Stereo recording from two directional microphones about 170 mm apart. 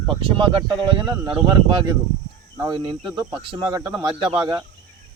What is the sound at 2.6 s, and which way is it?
Speech, 25° right (ahead or behind).